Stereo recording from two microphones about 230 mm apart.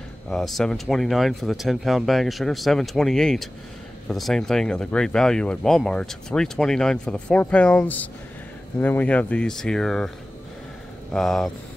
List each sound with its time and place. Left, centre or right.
0.3 s speech: centre